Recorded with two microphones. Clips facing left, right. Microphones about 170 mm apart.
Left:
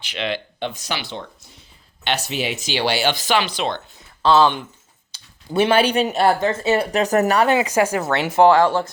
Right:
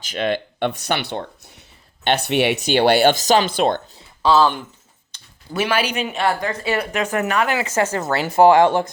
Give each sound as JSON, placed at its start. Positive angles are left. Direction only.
{"t": 0.0, "sound": "speech", "side_deg": -45}
{"t": 4.2, "sound": "speech", "side_deg": -5}
{"t": 5.5, "sound": "speech", "side_deg": 25}
{"t": 6.4, "sound": "speech", "side_deg": 25}
{"t": 7.5, "sound": "speech", "side_deg": 15}
{"t": 8.1, "sound": "speech", "side_deg": 0}
{"t": 8.4, "sound": "speech", "side_deg": -20}